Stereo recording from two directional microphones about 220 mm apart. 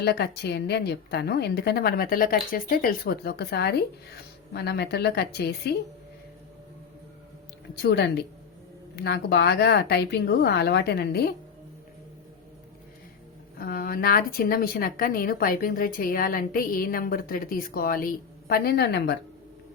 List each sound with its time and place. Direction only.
0.0 s a woman's voice: 50° left (ahead or behind)
7.8 s a woman's voice: 50° left (ahead or behind)
13.6 s a woman's voice: 40° left (ahead or behind)